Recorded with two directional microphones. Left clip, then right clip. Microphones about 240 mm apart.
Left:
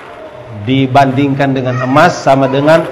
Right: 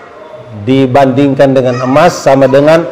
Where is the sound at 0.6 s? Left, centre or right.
Right.